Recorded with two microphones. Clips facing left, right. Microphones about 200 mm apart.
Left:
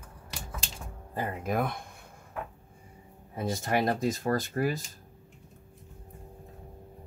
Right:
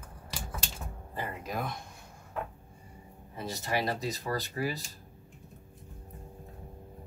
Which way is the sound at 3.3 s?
50° left (ahead or behind).